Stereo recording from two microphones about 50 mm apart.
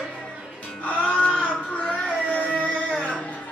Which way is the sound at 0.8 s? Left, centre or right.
Left.